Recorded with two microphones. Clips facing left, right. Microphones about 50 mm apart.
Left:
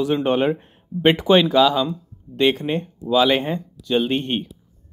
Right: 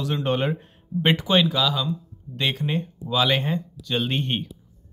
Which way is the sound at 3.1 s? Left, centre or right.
Centre.